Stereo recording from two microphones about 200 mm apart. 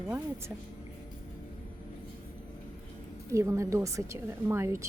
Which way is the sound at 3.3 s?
15° right (ahead or behind).